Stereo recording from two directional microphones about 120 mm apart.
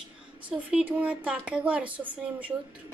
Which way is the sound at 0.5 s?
10° right (ahead or behind).